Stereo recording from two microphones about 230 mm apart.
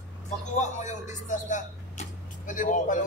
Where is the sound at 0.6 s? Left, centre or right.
Left.